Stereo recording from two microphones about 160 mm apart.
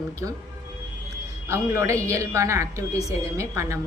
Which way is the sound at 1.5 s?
20° right (ahead or behind).